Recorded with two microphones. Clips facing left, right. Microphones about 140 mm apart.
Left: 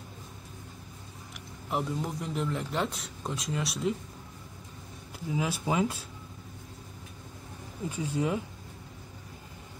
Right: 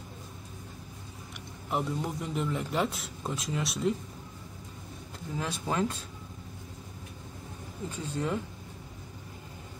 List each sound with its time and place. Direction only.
1.7 s a man's voice: centre (ahead or behind)
5.3 s speech: 10° left (ahead or behind)
7.9 s speech: 10° left (ahead or behind)